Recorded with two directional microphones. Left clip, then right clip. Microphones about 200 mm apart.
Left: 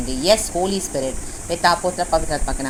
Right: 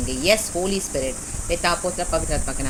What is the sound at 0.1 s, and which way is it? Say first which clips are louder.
Speech: left 3 dB; 20° right (ahead or behind).